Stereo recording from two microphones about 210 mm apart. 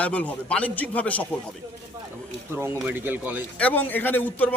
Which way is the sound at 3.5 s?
10° left (ahead or behind).